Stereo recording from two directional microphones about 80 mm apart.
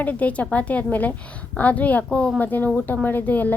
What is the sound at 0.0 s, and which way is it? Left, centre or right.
A woman's voice, centre.